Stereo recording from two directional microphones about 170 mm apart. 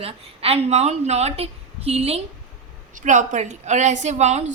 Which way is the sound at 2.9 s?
45° right (ahead or behind).